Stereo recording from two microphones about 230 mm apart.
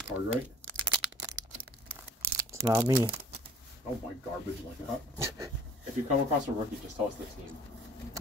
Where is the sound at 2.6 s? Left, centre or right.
Centre.